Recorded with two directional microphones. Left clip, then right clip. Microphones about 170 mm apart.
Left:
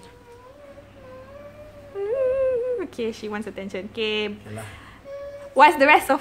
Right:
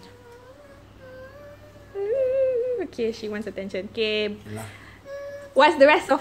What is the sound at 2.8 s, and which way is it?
Speech, 5° right (ahead or behind).